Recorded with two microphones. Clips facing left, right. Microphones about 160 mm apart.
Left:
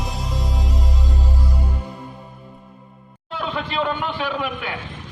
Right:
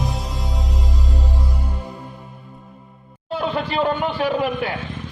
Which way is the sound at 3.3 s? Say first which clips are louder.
Right 3 dB; 40° right (ahead or behind).